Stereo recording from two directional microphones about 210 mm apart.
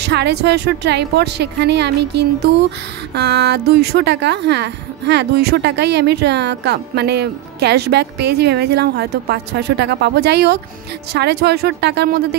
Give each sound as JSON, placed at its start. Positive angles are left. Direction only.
{"t": 0.0, "sound": "a woman's voice", "side_deg": -50}